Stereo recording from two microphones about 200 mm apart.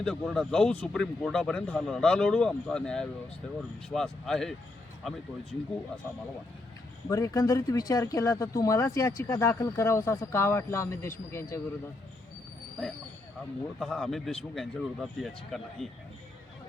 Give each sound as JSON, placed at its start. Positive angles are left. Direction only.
{"t": 0.0, "sound": "speech", "side_deg": 0}
{"t": 7.1, "sound": "speech", "side_deg": 15}
{"t": 13.7, "sound": "speech", "side_deg": 5}